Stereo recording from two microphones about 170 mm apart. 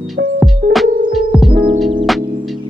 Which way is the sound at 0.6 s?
55° right (ahead or behind).